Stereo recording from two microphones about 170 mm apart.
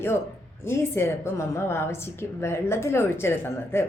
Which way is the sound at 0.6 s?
15° left (ahead or behind).